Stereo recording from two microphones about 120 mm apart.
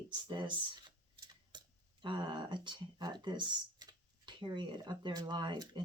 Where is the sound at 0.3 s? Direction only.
40° right (ahead or behind).